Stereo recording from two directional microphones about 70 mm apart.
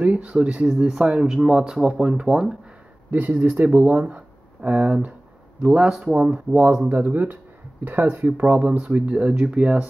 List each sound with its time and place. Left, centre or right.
0.0 s speech: centre
3.1 s speech: right
5.9 s speech: centre
6.3 s speech: centre
8.3 s speech: centre